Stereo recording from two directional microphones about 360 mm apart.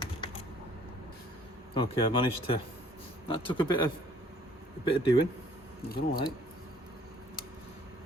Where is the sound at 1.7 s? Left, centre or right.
Centre.